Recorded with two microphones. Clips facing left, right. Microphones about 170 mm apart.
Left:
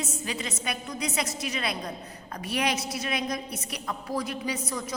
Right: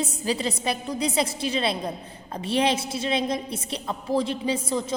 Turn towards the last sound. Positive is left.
turn(degrees=-25)  # may be behind; listen again after turning